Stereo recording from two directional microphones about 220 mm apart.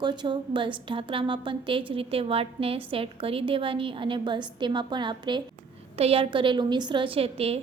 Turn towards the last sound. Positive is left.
turn(degrees=-25)  # may be behind; listen again after turning